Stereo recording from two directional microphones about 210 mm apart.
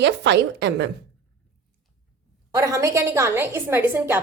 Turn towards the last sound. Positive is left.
turn(degrees=-10)  # may be behind; listen again after turning